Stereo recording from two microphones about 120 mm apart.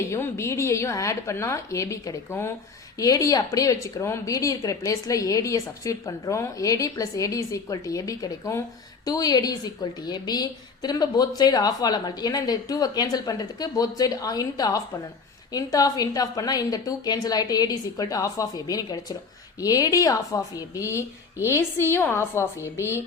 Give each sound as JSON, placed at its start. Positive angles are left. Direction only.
{"t": 0.1, "sound": "a woman's voice", "side_deg": 25}